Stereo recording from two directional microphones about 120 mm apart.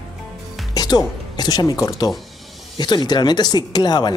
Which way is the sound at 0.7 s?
35° left (ahead or behind).